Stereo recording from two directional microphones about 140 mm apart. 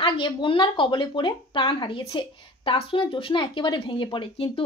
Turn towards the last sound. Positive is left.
turn(degrees=40)  # may be behind; listen again after turning